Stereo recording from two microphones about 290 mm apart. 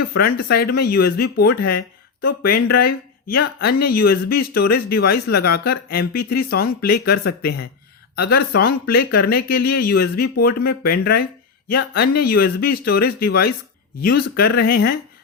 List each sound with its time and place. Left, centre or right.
0.2 s speech: left